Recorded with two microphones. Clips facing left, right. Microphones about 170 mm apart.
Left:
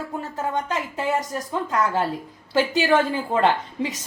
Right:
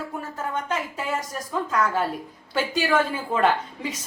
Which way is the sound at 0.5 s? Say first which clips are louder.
Left 2 dB; 20° left (ahead or behind).